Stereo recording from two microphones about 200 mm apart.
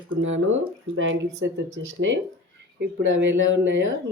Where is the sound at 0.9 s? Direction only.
75° right (ahead or behind).